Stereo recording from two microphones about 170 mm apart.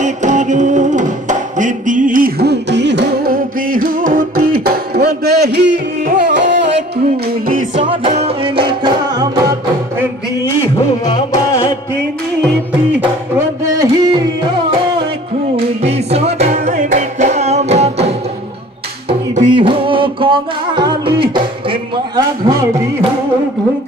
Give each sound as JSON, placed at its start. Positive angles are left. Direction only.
{"t": 0.0, "sound": "music", "side_deg": -45}
{"t": 6.0, "sound": "carnatic music", "side_deg": -50}
{"t": 6.3, "sound": "music", "side_deg": -90}
{"t": 7.4, "sound": "music", "side_deg": -50}
{"t": 7.9, "sound": "music", "side_deg": -35}
{"t": 11.1, "sound": "music", "side_deg": 20}
{"t": 15.5, "sound": "music", "side_deg": -35}